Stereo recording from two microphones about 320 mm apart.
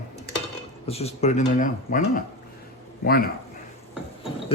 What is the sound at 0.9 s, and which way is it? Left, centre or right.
Speech, centre.